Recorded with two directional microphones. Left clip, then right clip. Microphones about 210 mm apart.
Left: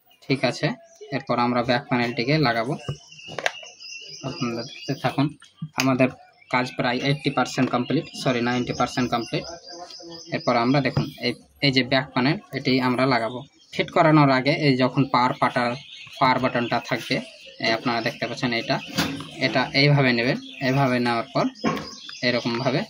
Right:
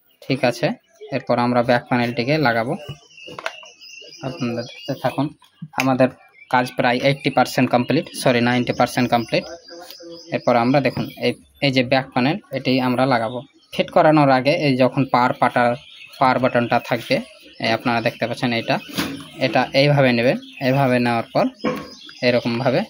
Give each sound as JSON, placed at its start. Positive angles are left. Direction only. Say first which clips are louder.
{"t": 0.3, "sound": "speech", "louder": "right 4 dB", "side_deg": -30}
{"t": 4.2, "sound": "speech", "louder": "right 4 dB", "side_deg": -20}
{"t": 4.8, "sound": "speech", "louder": "right 2 dB", "side_deg": 0}
{"t": 6.5, "sound": "speech", "louder": "right 6 dB", "side_deg": -35}
{"t": 10.3, "sound": "speech", "louder": "right 5 dB", "side_deg": -30}